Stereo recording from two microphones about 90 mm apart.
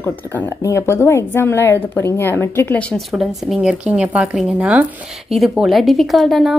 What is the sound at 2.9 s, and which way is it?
A woman's voice, 5° right (ahead or behind).